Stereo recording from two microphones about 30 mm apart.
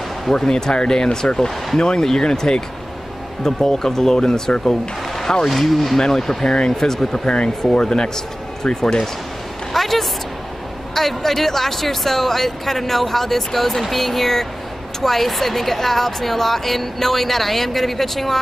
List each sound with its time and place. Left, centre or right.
0.5 s speech: left
5.5 s speech: centre
5.9 s speech: centre
7.1 s speech: left
8.6 s a woman's voice: centre